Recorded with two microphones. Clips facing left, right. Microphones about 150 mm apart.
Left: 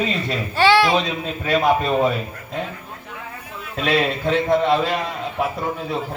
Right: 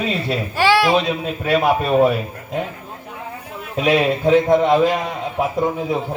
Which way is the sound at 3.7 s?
15° right (ahead or behind).